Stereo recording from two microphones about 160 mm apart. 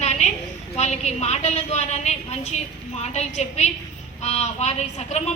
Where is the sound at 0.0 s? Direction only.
45° left (ahead or behind).